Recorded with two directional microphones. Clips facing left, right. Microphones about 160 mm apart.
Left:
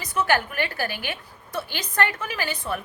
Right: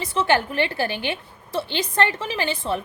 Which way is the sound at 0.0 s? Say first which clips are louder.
Right 2 dB; 25° right (ahead or behind).